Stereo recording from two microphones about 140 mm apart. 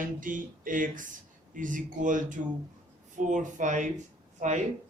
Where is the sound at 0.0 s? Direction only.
70° right (ahead or behind).